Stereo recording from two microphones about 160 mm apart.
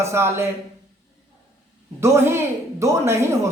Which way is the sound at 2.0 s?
15° right (ahead or behind).